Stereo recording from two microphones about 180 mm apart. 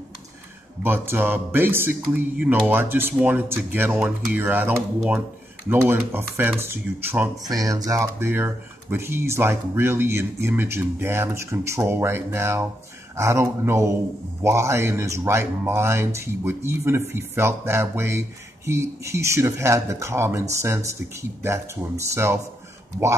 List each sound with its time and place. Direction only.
0.8 s speech: 10° right (ahead or behind)